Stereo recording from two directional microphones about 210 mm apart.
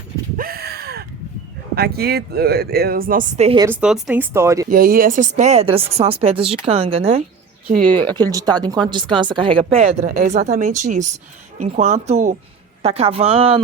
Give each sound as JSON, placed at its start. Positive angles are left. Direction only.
{"t": 0.3, "sound": "a sound", "side_deg": -45}
{"t": 1.7, "sound": "speech", "side_deg": -50}
{"t": 3.6, "sound": "speech", "side_deg": -5}
{"t": 4.7, "sound": "speech", "side_deg": -45}
{"t": 7.9, "sound": "speech", "side_deg": 5}
{"t": 8.3, "sound": "speech", "side_deg": -20}